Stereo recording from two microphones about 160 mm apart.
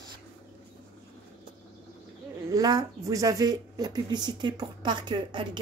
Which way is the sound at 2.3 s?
20° right (ahead or behind).